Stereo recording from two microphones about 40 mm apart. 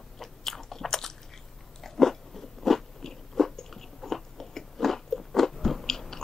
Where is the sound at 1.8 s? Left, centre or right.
Centre.